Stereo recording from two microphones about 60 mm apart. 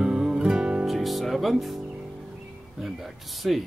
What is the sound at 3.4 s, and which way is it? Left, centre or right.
Speech, centre.